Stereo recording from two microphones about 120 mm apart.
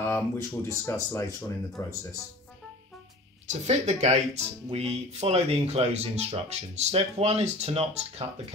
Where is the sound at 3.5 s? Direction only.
70° right (ahead or behind).